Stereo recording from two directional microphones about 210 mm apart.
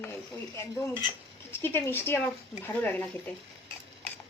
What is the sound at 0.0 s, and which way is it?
Speech, 10° left (ahead or behind).